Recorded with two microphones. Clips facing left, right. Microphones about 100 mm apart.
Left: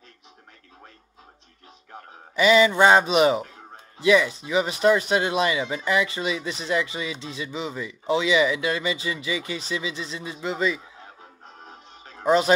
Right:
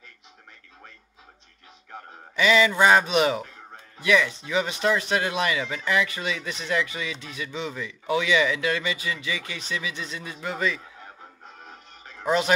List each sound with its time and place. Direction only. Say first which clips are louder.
2.3 s speech: left 3 dB; 25° left (ahead or behind)
3.5 s music: even; 20° left (ahead or behind)
4.5 s speech: left 6 dB; 20° left (ahead or behind)